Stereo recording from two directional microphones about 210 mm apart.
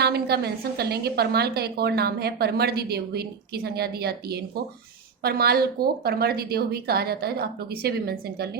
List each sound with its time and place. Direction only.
0.0 s a woman's voice: 50° right (ahead or behind)